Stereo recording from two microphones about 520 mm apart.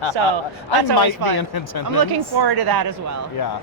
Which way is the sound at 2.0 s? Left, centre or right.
Right.